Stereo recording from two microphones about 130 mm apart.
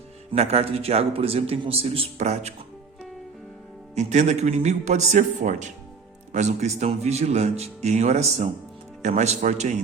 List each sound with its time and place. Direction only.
0.3 s a man's voice: 55° right (ahead or behind)
2.2 s speech: 65° right (ahead or behind)
3.9 s speech: 65° right (ahead or behind)